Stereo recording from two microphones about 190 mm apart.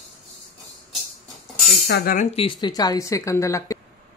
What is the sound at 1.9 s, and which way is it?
Speech, 55° left (ahead or behind).